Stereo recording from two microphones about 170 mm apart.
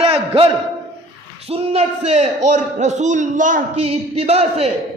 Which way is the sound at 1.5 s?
35° right (ahead or behind).